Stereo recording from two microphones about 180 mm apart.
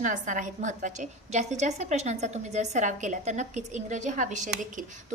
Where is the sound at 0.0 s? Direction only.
45° right (ahead or behind).